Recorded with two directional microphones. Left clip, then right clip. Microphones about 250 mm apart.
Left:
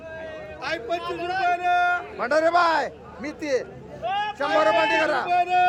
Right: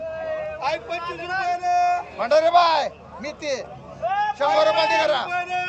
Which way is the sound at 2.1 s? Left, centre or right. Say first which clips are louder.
Right 4 dB; centre.